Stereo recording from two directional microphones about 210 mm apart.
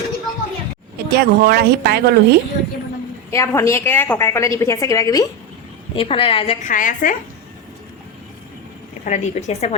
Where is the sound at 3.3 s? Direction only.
15° left (ahead or behind).